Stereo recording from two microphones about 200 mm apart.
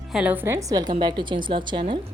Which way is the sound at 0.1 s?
5° right (ahead or behind).